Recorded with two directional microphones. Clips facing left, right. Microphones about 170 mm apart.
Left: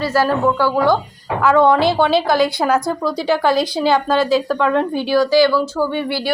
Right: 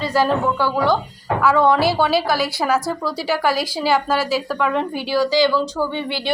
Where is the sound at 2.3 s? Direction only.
5° right (ahead or behind).